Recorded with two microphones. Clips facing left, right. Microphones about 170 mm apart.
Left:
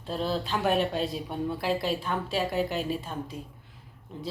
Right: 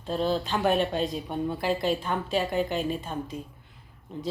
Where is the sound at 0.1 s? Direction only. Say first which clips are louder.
Right 3 dB; centre (ahead or behind).